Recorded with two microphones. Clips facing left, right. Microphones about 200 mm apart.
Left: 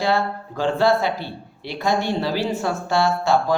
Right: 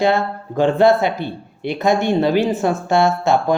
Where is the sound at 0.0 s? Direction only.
20° right (ahead or behind).